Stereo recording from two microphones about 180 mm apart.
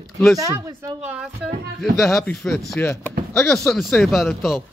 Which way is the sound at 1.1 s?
5° right (ahead or behind).